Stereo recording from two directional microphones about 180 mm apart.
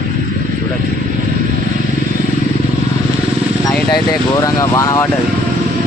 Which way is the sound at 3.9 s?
20° left (ahead or behind).